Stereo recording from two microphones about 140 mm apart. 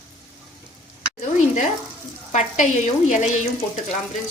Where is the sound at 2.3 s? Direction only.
60° left (ahead or behind).